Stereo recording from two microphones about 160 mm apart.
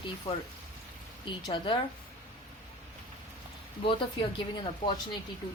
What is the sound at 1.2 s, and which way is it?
Speech, 30° left (ahead or behind).